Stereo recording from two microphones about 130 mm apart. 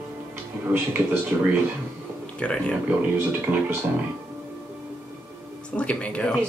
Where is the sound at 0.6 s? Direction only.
20° right (ahead or behind).